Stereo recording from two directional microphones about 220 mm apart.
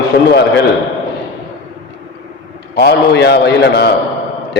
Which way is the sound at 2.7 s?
50° left (ahead or behind).